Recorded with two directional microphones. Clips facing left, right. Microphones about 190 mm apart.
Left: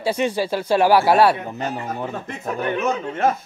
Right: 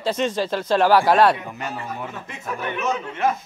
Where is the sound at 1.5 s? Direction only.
35° left (ahead or behind).